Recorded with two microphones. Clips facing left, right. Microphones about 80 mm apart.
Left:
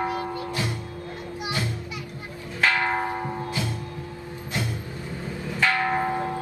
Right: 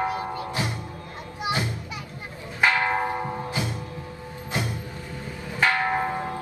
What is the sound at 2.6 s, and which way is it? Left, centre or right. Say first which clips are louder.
Bell: right 1 dB; right.